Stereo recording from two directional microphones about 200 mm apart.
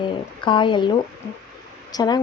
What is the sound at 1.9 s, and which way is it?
Speech, 20° left (ahead or behind).